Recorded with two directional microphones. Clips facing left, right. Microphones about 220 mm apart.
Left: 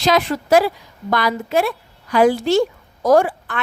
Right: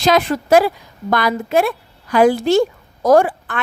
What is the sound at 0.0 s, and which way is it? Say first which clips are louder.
A woman's voice: right 2 dB; 50° right (ahead or behind).